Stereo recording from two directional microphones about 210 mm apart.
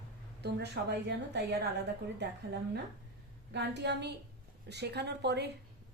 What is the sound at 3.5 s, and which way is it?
A woman's voice, 55° right (ahead or behind).